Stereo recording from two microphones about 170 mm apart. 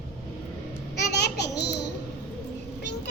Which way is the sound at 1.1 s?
75° left (ahead or behind).